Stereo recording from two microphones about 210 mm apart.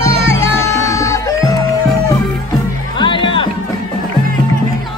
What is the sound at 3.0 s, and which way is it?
Music, 20° left (ahead or behind).